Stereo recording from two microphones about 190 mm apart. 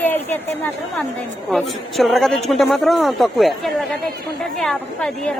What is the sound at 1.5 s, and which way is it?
A woman's voice, centre (ahead or behind).